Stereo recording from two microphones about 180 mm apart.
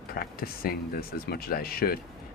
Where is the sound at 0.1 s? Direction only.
55° left (ahead or behind).